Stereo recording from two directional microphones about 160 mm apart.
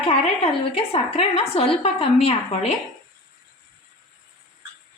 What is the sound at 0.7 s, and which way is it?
A woman's voice, 40° left (ahead or behind).